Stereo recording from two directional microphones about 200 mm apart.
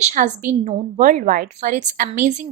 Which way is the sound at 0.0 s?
40° right (ahead or behind).